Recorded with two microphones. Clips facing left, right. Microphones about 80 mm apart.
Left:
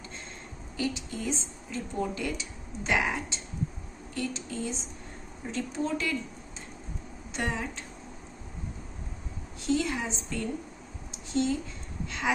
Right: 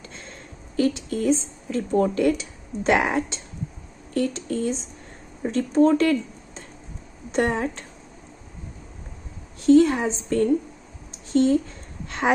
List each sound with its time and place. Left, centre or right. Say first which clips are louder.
0.7 s a woman's voice: right 10 dB; right
9.7 s a woman's voice: right 13 dB; right